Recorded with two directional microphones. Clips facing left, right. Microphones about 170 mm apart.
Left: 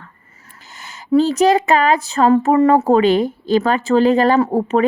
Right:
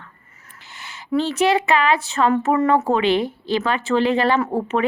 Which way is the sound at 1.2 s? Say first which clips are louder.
Left 5 dB; 40° left (ahead or behind).